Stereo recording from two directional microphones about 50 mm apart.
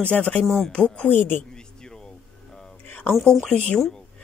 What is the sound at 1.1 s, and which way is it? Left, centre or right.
Speech, left.